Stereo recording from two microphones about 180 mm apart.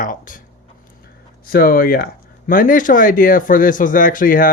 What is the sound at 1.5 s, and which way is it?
Speech, 55° left (ahead or behind).